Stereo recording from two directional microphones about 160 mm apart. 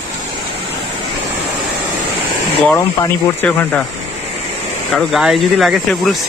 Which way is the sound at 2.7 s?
15° left (ahead or behind).